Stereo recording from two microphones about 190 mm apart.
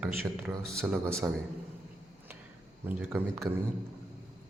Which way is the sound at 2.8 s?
5° right (ahead or behind).